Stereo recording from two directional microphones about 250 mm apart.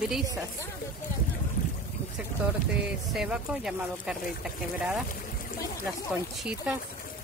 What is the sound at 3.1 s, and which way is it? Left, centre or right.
Speech, centre.